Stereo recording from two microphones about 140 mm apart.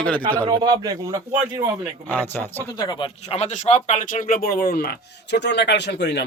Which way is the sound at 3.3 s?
50° left (ahead or behind).